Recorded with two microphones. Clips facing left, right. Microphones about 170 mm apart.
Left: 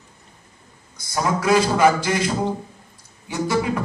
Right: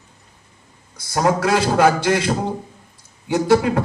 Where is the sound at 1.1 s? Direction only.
70° right (ahead or behind).